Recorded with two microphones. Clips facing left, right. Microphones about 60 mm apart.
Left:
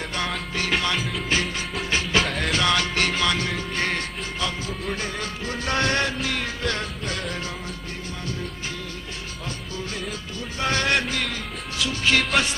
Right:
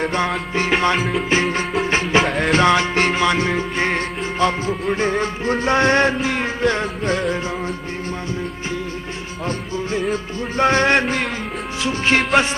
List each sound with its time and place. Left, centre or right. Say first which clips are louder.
0.6 s music: right 7 dB; right
0.9 s music: right 7 dB; right
1.3 s music: right 6 dB; right
4.4 s music: right 11 dB; right
10.0 s music: right 10 dB; right